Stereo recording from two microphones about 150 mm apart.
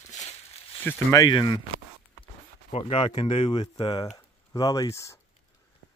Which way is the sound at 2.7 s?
40° left (ahead or behind).